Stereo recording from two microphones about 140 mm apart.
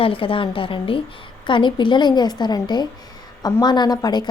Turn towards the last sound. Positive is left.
turn(degrees=30)  # may be behind; listen again after turning